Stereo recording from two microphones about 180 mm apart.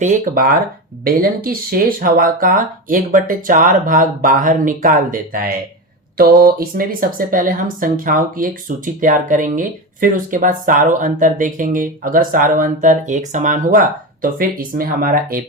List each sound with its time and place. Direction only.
0.0 s speech: 50° right (ahead or behind)